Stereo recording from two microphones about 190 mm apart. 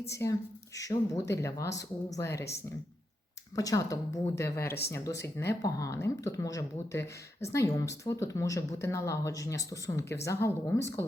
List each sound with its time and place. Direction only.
0.1 s speech: 15° left (ahead or behind)
3.5 s speech: 15° left (ahead or behind)